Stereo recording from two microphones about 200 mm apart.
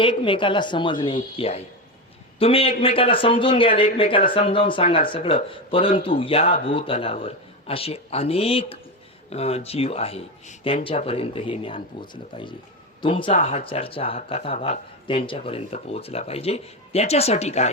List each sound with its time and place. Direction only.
0.0 s speech: 25° left (ahead or behind)